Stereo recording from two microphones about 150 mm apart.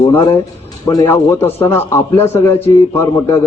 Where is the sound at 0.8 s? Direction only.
20° left (ahead or behind).